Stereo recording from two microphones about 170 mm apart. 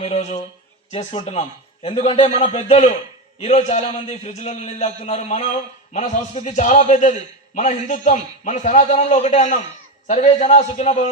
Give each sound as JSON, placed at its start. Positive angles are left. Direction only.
{"t": 0.0, "sound": "a man's voice", "side_deg": 40}